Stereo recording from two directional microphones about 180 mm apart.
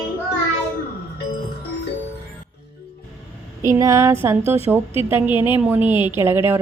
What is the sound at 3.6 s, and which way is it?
A woman's voice, 15° right (ahead or behind).